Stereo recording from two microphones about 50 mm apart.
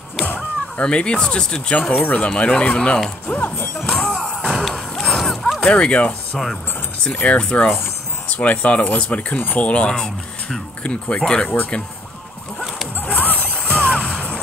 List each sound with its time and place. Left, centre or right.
0.7 s speech: left
3.3 s speech: left
3.8 s music: centre
4.2 s music: centre
4.5 s horse: centre
5.6 s speech: left
6.3 s speech: centre
7.2 s speech: left
9.8 s speech: centre
13.0 s music: left